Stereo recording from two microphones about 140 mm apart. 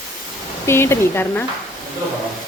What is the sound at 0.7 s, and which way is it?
Speech, 20° left (ahead or behind).